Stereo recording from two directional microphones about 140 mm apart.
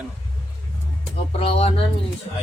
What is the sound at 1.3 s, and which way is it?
Speech, 45° left (ahead or behind).